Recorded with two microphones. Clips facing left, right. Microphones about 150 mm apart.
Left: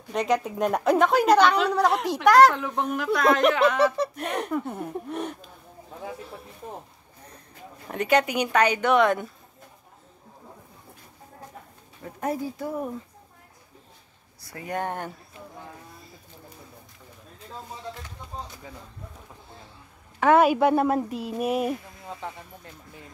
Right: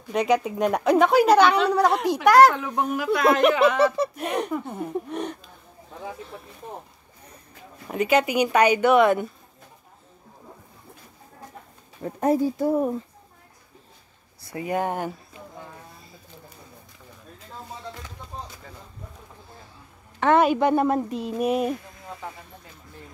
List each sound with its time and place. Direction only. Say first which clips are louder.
0.1 s a woman's voice: right 3 dB; centre (ahead or behind)
7.9 s speech: right 2 dB; 5° right (ahead or behind)
12.0 s speech: right 8 dB; 30° right (ahead or behind)
14.5 s speech: right 4 dB; 10° right (ahead or behind)
20.2 s a woman's voice: even; 5° left (ahead or behind)